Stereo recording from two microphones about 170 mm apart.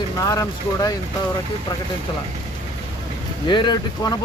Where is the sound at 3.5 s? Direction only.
25° left (ahead or behind).